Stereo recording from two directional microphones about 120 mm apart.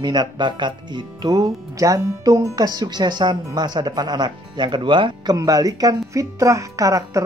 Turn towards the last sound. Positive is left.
turn(degrees=-30)  # may be behind; listen again after turning